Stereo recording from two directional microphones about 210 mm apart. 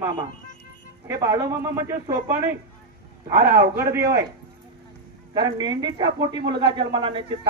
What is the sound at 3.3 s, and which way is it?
Speech, 45° right (ahead or behind).